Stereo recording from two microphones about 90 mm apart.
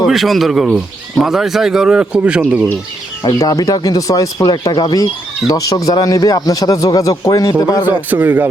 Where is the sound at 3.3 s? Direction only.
40° left (ahead or behind).